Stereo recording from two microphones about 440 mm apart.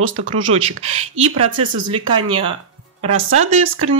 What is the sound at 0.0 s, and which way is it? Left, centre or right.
Speech, right.